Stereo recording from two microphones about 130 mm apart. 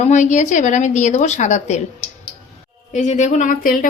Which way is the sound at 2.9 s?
65° left (ahead or behind).